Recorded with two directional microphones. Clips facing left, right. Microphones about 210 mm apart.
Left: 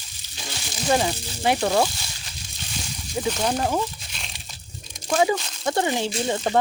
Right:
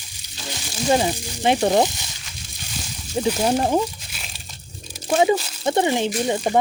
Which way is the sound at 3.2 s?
25° right (ahead or behind).